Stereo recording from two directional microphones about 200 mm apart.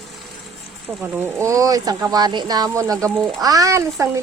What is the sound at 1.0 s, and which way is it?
Speech, 10° right (ahead or behind).